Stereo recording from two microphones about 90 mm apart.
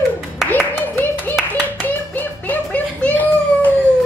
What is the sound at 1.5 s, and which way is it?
Hands, 20° left (ahead or behind).